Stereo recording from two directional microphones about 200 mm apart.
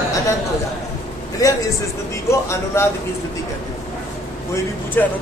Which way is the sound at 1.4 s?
20° left (ahead or behind).